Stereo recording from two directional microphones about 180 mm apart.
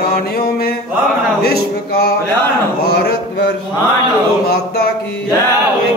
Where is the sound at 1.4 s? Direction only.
60° left (ahead or behind).